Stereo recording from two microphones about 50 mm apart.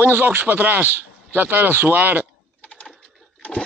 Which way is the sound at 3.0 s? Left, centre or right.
Left.